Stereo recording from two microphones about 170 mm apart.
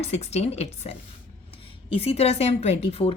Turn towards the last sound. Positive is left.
turn(degrees=40)  # may be behind; listen again after turning